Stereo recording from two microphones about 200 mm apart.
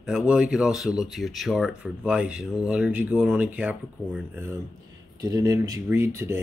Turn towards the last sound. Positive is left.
turn(degrees=-10)  # may be behind; listen again after turning